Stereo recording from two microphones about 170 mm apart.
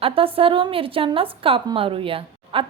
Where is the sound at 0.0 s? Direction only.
35° right (ahead or behind).